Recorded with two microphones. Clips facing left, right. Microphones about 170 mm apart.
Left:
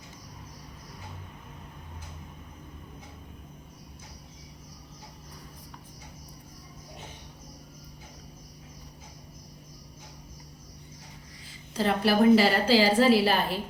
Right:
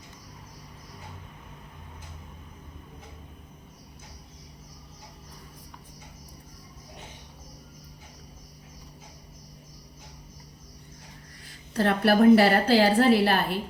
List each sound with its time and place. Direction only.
11.4 s a woman's voice: 60° right (ahead or behind)